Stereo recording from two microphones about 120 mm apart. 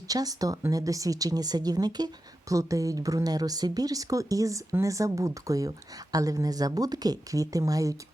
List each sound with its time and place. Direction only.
0.1 s speech: 30° right (ahead or behind)